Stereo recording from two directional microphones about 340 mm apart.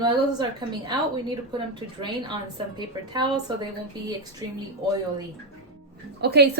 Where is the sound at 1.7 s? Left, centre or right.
Centre.